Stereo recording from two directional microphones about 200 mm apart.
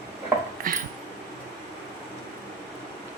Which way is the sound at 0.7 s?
45° right (ahead or behind).